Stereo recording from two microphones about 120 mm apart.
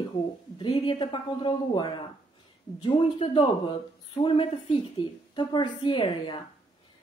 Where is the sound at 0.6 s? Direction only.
35° left (ahead or behind).